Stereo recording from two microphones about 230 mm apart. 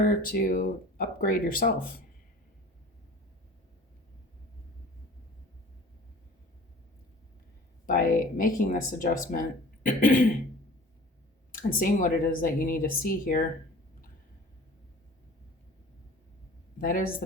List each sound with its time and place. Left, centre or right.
0.0 s speech: left
7.9 s speech: left
11.5 s speech: left
16.7 s speech: left